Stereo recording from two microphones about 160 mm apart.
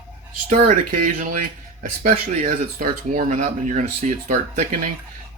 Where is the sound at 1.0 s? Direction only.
60° right (ahead or behind).